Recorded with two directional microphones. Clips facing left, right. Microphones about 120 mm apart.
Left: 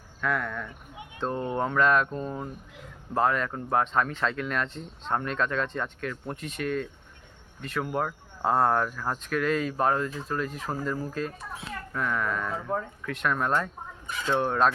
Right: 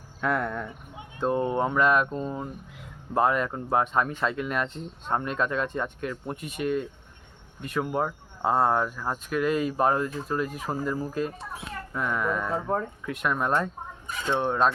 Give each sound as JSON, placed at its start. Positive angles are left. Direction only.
{"t": 0.2, "sound": "speech", "side_deg": -30}
{"t": 1.2, "sound": "speech", "side_deg": -15}
{"t": 14.3, "sound": "speech", "side_deg": 0}